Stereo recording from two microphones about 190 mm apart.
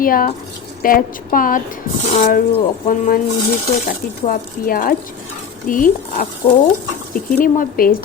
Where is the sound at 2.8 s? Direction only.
45° left (ahead or behind).